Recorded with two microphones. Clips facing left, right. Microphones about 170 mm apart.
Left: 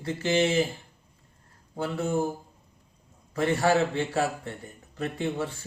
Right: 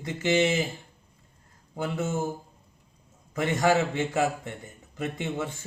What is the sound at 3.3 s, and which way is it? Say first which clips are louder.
A man's voice: even; 15° right (ahead or behind).